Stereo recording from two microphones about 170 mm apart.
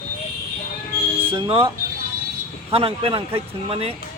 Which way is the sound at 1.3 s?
30° right (ahead or behind).